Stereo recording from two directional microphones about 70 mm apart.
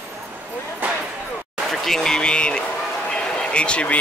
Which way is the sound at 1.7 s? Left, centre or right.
Centre.